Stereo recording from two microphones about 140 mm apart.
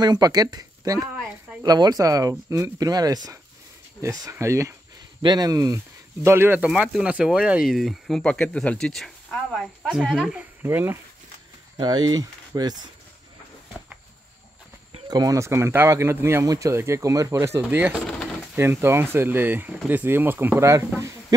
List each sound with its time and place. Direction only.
0.0 s speech: 30° right (ahead or behind)
5.2 s speech: 30° right (ahead or behind)
6.2 s speech: 15° right (ahead or behind)
6.7 s speech: 5° right (ahead or behind)
11.8 s speech: 30° right (ahead or behind)
15.0 s speech: 25° right (ahead or behind)
17.9 s pigeon: 5° left (ahead or behind)
18.6 s speech: 15° right (ahead or behind)